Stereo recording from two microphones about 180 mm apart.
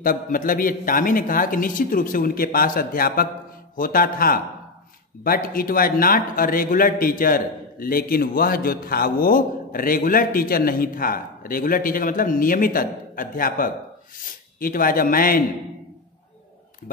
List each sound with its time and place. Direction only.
0.0 s a man's voice: 50° left (ahead or behind)